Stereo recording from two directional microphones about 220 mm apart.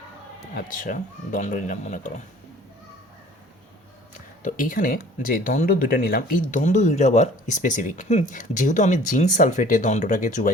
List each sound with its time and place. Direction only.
0.5 s speech: 35° left (ahead or behind)
4.4 s speech: 40° left (ahead or behind)